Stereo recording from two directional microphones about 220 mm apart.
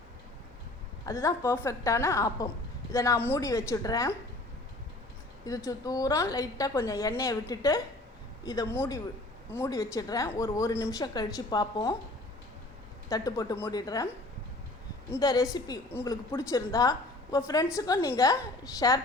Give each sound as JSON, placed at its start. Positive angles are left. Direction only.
{"t": 1.0, "sound": "speech", "side_deg": 15}
{"t": 5.5, "sound": "speech", "side_deg": 15}
{"t": 13.1, "sound": "speech", "side_deg": 15}
{"t": 15.1, "sound": "speech", "side_deg": 15}